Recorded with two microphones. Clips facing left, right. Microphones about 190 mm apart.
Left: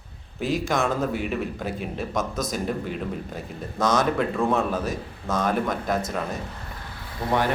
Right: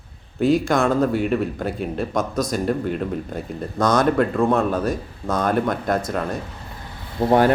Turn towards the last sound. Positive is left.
turn(degrees=-30)  # may be behind; listen again after turning